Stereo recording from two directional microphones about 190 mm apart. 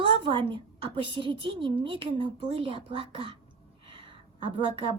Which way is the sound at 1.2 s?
25° right (ahead or behind).